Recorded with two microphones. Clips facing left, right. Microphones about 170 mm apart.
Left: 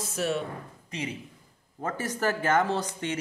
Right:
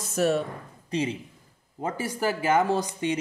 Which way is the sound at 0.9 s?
30° right (ahead or behind).